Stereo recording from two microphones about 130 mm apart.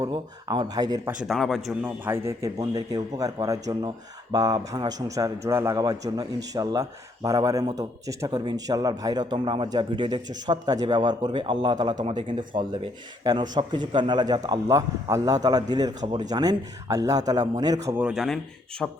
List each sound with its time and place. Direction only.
0.1 s speech: 35° right (ahead or behind)
1.2 s speech: centre (ahead or behind)
1.8 s a man's voice: 20° right (ahead or behind)
17.9 s speech: 5° right (ahead or behind)